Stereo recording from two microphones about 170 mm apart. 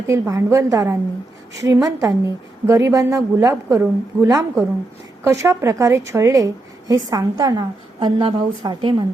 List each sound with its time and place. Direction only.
0.1 s a woman's voice: 15° right (ahead or behind)